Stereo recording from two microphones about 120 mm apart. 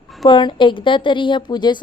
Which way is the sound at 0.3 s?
40° left (ahead or behind).